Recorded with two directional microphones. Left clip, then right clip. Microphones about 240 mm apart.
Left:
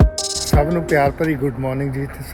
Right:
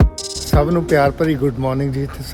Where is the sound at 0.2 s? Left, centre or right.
Centre.